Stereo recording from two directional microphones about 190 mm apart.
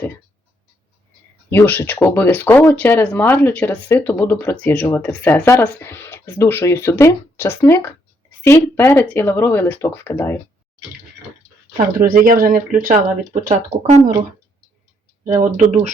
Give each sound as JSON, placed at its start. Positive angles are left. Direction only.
{"t": 1.5, "sound": "speech", "side_deg": 10}
{"t": 11.9, "sound": "speech", "side_deg": -50}
{"t": 15.3, "sound": "speech", "side_deg": -40}